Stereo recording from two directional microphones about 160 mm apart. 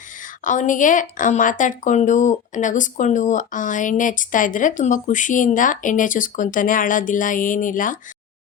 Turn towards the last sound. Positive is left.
turn(degrees=55)  # may be behind; listen again after turning